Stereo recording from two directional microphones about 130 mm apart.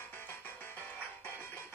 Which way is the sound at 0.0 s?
15° left (ahead or behind).